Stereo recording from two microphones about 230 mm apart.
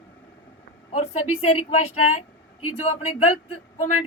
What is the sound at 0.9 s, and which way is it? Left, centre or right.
Speech, left.